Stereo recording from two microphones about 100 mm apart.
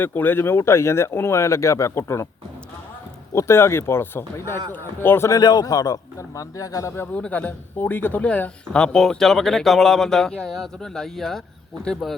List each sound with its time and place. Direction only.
0.0 s speech: 20° left (ahead or behind)
3.3 s speech: 25° left (ahead or behind)
5.3 s a man's voice: 45° left (ahead or behind); by 7.1 s 30° left (ahead or behind)
7.1 s speech: 15° left (ahead or behind)